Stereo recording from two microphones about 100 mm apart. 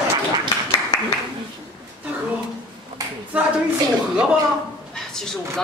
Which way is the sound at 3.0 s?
35° right (ahead or behind).